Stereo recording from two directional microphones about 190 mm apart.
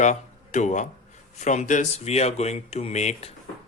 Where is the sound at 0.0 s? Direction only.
40° left (ahead or behind).